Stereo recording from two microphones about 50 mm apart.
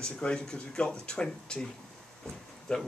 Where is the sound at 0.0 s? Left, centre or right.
Centre.